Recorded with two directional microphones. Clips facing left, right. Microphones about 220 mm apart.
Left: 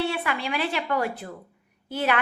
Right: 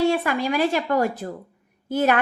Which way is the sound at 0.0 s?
45° right (ahead or behind).